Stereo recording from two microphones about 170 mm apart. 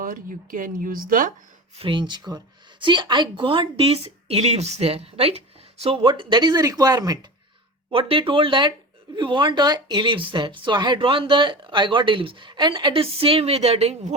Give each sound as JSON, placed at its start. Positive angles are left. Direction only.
{"t": 0.0, "sound": "speech", "side_deg": -55}
{"t": 1.8, "sound": "speech", "side_deg": -30}